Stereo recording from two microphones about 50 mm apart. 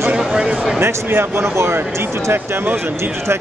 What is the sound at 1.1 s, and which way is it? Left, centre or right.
Speech, right.